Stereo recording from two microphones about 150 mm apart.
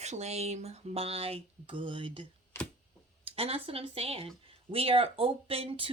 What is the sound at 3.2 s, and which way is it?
Speech, 40° right (ahead or behind).